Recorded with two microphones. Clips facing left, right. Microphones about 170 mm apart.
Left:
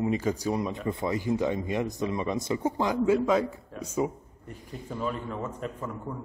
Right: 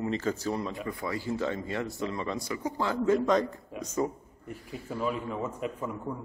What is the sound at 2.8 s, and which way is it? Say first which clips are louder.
Speech: left 1 dB; 10° left (ahead or behind).